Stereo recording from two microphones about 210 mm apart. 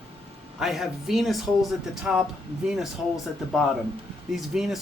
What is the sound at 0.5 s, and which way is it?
Speech, centre (ahead or behind).